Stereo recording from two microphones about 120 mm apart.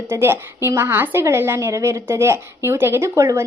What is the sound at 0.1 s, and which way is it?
A woman's voice, 20° right (ahead or behind).